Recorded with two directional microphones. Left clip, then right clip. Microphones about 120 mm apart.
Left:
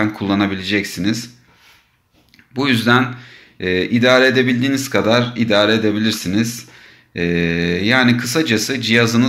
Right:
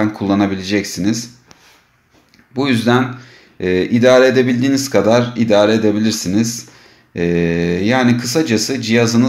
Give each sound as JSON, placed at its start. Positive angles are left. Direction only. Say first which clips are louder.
{"t": 0.0, "sound": "speech", "louder": "right 2 dB", "side_deg": -25}
{"t": 2.5, "sound": "speech", "louder": "even", "side_deg": -20}